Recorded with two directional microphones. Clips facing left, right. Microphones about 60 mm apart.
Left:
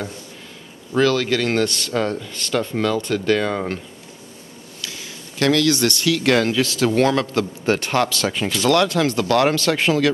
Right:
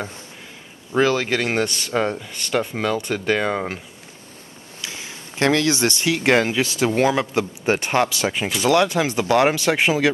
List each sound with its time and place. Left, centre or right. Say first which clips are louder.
0.9 s speech: left 1 dB; centre
4.8 s speech: right 1 dB; right